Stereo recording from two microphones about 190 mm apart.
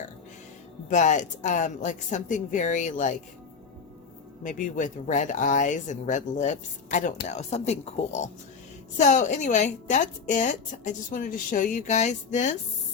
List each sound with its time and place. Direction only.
0.9 s speech: 40° left (ahead or behind)
4.4 s speech: 40° left (ahead or behind)